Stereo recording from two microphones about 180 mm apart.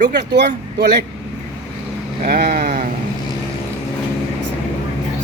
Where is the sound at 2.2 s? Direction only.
55° right (ahead or behind).